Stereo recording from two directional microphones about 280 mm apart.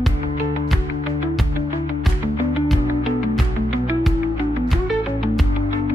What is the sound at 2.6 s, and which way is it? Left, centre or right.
Music, centre.